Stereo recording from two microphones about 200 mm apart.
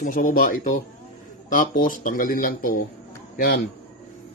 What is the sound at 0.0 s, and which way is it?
Speech, 45° left (ahead or behind).